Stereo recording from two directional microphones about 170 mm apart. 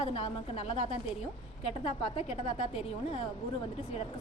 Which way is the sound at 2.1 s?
35° left (ahead or behind).